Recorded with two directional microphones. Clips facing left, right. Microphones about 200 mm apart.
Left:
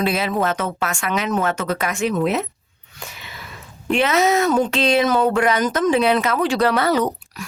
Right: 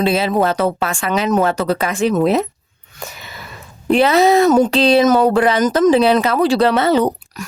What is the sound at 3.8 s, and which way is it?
Speech, 35° right (ahead or behind).